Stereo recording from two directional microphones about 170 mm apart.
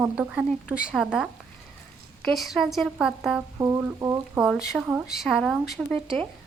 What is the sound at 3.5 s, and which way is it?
Speech, 15° right (ahead or behind).